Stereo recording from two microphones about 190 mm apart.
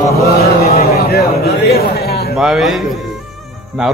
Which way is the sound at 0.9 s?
55° left (ahead or behind).